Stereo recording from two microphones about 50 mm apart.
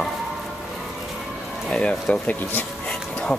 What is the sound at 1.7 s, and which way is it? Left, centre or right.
Speech, left.